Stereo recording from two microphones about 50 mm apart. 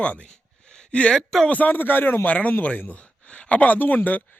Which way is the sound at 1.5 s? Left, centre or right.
Left.